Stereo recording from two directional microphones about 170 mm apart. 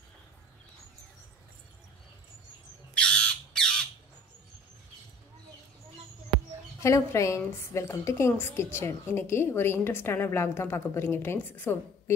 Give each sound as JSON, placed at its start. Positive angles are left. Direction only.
{"t": 2.9, "sound": "squawk", "side_deg": 5}
{"t": 6.8, "sound": "a woman's voice", "side_deg": 15}